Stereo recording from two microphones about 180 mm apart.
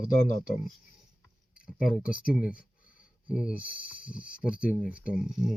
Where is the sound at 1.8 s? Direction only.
5° right (ahead or behind).